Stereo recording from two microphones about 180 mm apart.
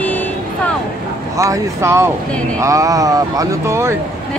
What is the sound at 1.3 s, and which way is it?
Speech, 15° right (ahead or behind).